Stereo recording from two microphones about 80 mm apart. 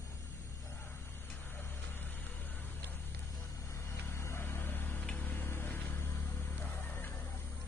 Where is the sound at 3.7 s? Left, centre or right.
Left.